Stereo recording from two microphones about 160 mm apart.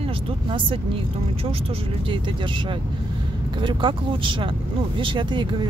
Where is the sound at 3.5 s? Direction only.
30° right (ahead or behind).